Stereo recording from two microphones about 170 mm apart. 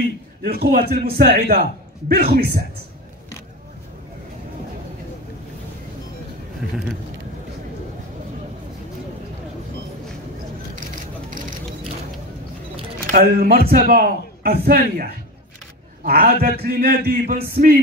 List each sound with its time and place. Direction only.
0.4 s a man's voice: 65° right (ahead or behind)
11.2 s a sound: 50° right (ahead or behind)
13.1 s a man's voice: 60° right (ahead or behind)